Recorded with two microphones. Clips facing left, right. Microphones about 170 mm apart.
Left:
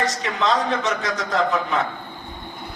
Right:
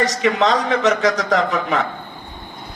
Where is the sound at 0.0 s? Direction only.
90° right.